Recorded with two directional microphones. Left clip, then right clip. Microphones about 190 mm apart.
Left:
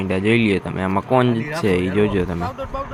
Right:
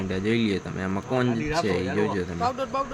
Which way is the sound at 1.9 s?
20° left (ahead or behind).